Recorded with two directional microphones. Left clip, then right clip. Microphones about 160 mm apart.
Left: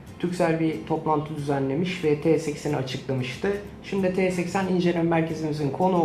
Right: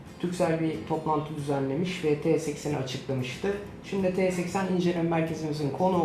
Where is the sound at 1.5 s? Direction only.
5° left (ahead or behind).